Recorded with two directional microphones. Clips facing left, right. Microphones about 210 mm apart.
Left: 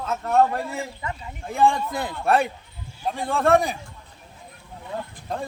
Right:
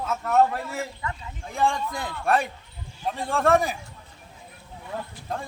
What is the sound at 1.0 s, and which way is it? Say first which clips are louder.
Speech: left 1 dB; 20° left (ahead or behind).